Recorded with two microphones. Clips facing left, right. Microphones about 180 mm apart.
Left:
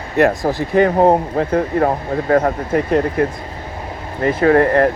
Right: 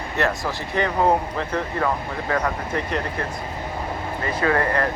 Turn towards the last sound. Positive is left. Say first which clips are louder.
# left 9 dB
turn(degrees=45)  # may be behind; listen again after turning